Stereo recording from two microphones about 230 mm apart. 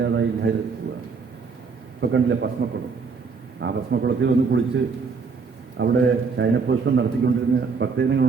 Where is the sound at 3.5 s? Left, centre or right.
Right.